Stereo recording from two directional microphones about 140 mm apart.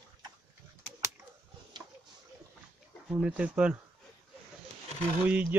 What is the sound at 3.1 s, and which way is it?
Speech, 5° right (ahead or behind).